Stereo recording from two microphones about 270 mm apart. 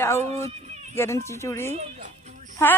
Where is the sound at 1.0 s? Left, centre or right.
Centre.